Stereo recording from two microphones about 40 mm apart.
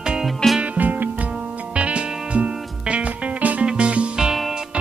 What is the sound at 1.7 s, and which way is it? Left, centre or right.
Music, right.